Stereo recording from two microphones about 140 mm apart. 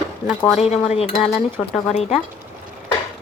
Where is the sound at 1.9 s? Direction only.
50° left (ahead or behind).